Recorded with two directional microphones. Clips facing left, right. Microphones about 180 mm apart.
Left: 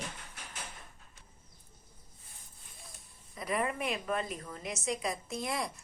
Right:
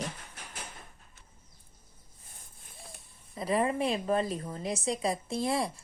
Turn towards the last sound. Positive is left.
turn(degrees=-30)  # may be behind; listen again after turning